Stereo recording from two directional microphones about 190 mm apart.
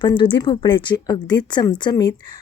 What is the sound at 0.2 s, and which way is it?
Speech, 25° left (ahead or behind).